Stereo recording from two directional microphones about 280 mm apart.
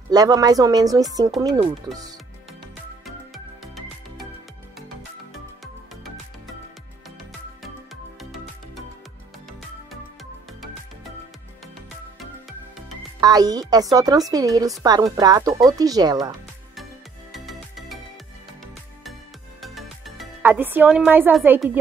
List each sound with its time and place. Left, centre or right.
0.1 s speech: centre
7.6 s music: centre
13.2 s speech: centre
17.3 s music: centre
19.6 s music: centre